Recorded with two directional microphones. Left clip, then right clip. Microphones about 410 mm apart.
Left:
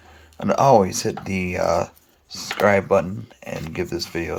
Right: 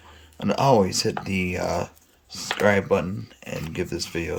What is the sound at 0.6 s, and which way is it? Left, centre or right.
Speech, right.